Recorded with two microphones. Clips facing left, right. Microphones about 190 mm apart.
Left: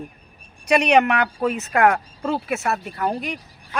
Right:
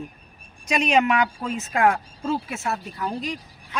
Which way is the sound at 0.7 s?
65° left (ahead or behind).